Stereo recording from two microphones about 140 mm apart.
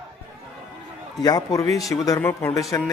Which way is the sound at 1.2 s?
25° left (ahead or behind).